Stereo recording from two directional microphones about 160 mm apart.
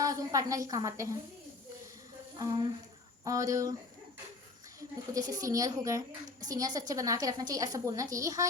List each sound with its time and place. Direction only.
0.0 s a woman's voice: 25° right (ahead or behind)
2.4 s a woman's voice: 20° right (ahead or behind)
5.1 s a woman's voice: 20° right (ahead or behind)